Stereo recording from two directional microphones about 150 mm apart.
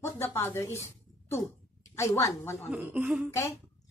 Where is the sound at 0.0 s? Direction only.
20° left (ahead or behind).